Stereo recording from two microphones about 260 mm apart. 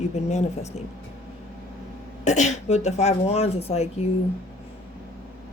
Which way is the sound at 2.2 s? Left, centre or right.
Left.